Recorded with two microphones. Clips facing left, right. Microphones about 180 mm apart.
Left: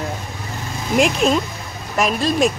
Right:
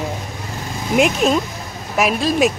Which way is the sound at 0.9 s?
5° right (ahead or behind).